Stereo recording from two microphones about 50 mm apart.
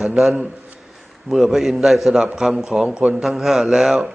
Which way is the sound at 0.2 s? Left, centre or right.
Centre.